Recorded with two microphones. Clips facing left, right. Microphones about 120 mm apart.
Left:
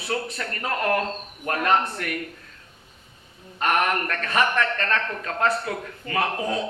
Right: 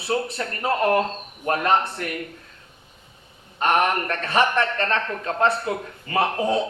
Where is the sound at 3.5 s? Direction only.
30° right (ahead or behind).